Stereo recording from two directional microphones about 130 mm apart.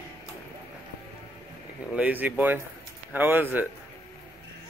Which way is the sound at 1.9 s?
10° right (ahead or behind).